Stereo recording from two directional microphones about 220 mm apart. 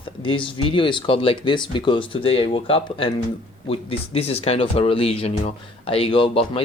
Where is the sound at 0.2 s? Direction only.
25° left (ahead or behind).